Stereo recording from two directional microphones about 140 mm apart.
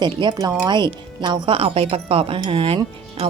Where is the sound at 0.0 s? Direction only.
30° right (ahead or behind).